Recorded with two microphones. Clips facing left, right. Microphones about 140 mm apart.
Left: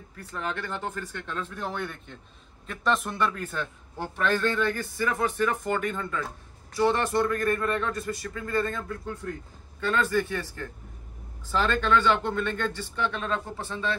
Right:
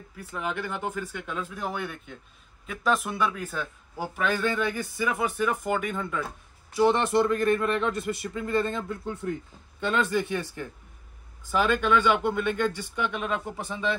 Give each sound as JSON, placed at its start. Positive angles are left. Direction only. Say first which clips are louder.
{"t": 0.2, "sound": "a man's voice", "louder": "right 1 dB", "side_deg": -10}
{"t": 6.9, "sound": "a man's voice", "louder": "right 2 dB", "side_deg": -20}